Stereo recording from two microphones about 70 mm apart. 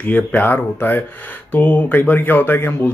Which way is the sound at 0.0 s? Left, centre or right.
Left.